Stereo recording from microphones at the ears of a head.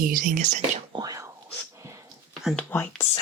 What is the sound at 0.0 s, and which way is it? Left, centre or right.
Speech, right.